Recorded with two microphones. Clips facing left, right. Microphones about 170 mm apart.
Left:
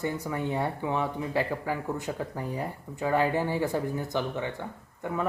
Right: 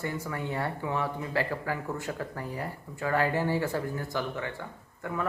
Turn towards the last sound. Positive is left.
turn(degrees=20)  # may be behind; listen again after turning